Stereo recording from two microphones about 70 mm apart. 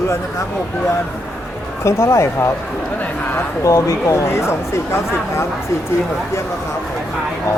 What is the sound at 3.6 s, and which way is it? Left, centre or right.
Speech, left.